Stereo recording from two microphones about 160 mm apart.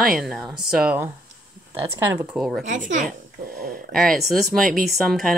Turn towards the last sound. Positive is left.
turn(degrees=0)  # may be behind; listen again after turning